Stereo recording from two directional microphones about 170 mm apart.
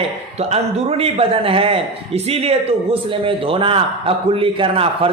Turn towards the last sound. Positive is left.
turn(degrees=-35)  # may be behind; listen again after turning